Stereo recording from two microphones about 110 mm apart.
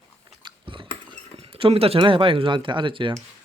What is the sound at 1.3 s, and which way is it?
Speech, 55° right (ahead or behind).